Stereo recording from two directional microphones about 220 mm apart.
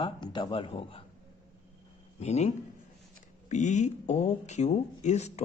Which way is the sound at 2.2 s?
30° left (ahead or behind).